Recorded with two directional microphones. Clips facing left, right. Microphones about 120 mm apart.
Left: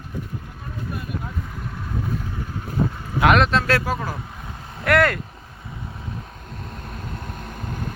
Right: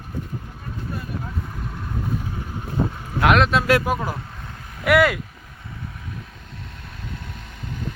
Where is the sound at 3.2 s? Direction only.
Centre (ahead or behind); by 4.2 s 15° right (ahead or behind).